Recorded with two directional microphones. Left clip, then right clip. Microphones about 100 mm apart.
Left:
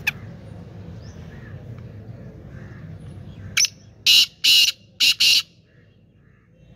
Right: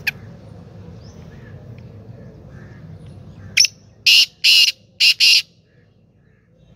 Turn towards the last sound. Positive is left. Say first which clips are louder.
# right 4 dB
turn(degrees=30)  # may be behind; listen again after turning